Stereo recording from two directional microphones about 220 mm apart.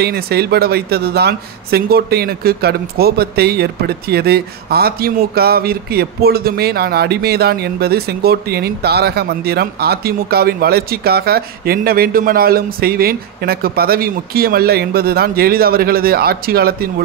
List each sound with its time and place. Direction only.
0.0 s speech: 45° right (ahead or behind)